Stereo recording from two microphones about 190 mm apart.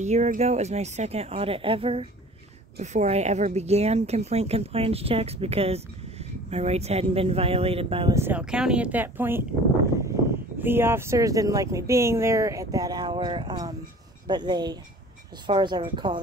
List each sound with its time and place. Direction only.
0.0 s speech: 35° right (ahead or behind)
8.1 s speech: 10° right (ahead or behind)
10.6 s speech: 10° right (ahead or behind)